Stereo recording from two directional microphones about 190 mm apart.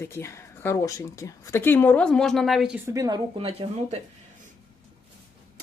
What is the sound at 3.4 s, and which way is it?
Speech, 30° right (ahead or behind).